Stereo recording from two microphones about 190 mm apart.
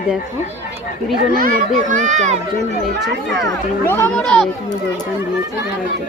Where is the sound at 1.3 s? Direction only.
45° right (ahead or behind).